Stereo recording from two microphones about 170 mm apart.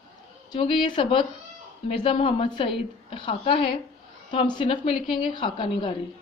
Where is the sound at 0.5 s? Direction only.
30° left (ahead or behind).